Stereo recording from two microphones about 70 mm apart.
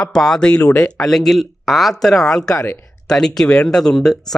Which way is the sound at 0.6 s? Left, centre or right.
Left.